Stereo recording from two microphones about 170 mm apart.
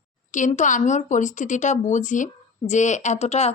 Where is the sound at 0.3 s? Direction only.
45° left (ahead or behind).